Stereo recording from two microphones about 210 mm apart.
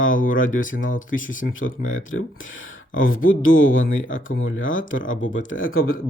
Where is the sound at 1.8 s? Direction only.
70° left (ahead or behind).